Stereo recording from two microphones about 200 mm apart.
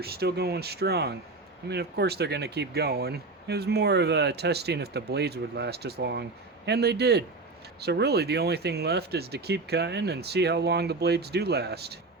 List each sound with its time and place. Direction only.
0.0 s speech: 50° right (ahead or behind)